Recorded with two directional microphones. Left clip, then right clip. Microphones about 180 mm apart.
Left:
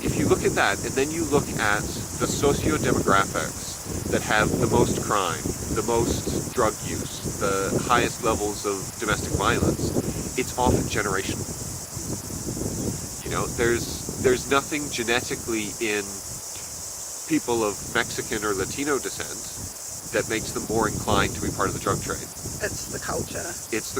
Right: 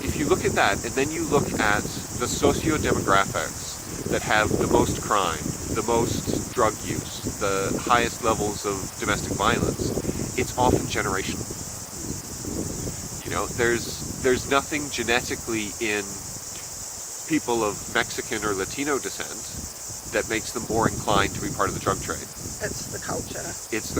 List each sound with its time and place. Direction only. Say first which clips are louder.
0.0 s speech: left 1 dB; 15° right (ahead or behind)
13.3 s speech: even; 15° right (ahead or behind)
17.3 s speech: even; 15° right (ahead or behind)
20.1 s speech: even; 15° right (ahead or behind)